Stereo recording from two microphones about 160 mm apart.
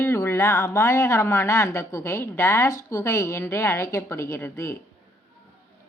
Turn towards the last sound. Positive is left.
turn(degrees=15)  # may be behind; listen again after turning